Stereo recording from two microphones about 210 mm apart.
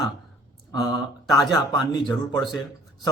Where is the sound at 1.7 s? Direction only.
20° left (ahead or behind).